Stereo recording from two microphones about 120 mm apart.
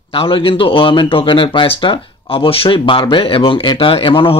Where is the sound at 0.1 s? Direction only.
50° left (ahead or behind).